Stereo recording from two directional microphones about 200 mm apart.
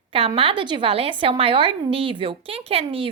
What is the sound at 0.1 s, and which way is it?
A woman's voice, 25° right (ahead or behind).